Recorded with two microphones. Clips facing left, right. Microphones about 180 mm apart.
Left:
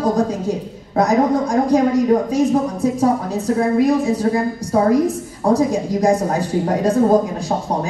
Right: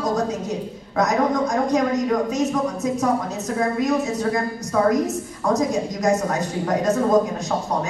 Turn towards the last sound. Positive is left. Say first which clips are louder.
# left 4 dB
turn(degrees=30)  # may be behind; listen again after turning